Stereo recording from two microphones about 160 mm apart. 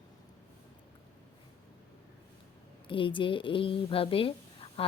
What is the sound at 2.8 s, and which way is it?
Speech, 30° left (ahead or behind).